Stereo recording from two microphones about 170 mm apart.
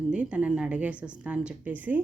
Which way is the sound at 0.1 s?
5° right (ahead or behind).